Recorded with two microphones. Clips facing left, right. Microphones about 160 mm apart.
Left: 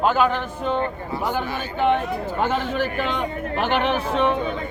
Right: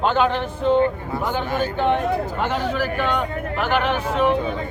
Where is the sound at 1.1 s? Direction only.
45° right (ahead or behind).